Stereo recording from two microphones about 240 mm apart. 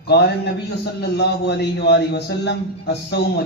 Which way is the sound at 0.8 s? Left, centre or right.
Left.